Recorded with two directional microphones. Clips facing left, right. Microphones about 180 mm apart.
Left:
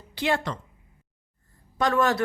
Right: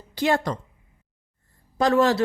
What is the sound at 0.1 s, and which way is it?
Speech, 40° right (ahead or behind).